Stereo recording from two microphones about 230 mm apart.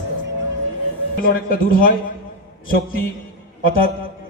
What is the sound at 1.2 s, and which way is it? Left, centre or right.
A man's voice, left.